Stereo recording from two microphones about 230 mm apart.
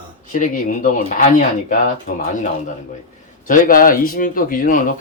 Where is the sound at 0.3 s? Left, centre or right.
Left.